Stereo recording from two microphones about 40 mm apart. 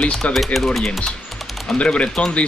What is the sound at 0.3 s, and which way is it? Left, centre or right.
Speech, centre.